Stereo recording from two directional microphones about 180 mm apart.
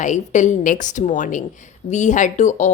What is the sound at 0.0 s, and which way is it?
A woman's voice, 45° left (ahead or behind).